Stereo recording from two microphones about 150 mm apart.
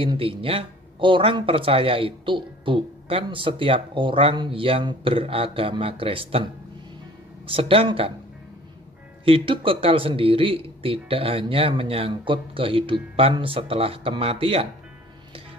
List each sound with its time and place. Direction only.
0.0 s speech: 35° right (ahead or behind)
9.2 s speech: 35° right (ahead or behind)